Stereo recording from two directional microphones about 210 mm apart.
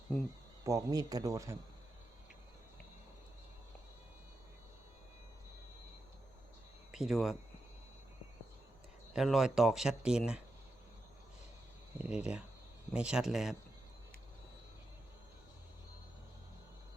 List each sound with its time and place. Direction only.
0.6 s speech: 15° right (ahead or behind)
6.9 s speech: centre (ahead or behind)
9.1 s speech: centre (ahead or behind)
12.0 s speech: 5° right (ahead or behind)